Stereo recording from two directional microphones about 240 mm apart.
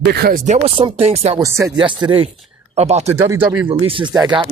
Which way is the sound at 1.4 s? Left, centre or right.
Centre.